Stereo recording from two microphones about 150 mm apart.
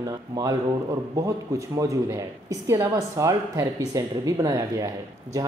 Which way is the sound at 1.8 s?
20° right (ahead or behind).